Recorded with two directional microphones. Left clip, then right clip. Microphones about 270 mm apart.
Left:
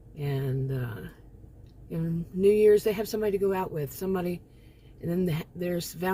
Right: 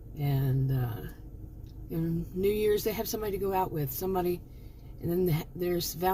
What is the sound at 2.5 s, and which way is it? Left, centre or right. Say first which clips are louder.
Speech: left 8 dB; centre.